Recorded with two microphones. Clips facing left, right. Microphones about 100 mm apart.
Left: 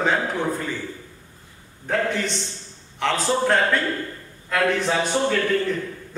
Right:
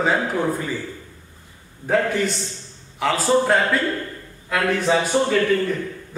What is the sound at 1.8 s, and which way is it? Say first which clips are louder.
A man's voice: right 4 dB; 5° right (ahead or behind).